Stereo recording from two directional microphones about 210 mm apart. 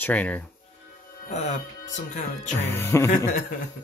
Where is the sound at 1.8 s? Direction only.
35° left (ahead or behind).